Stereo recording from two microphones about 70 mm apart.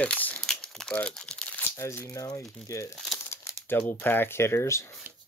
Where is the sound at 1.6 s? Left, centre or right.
Left.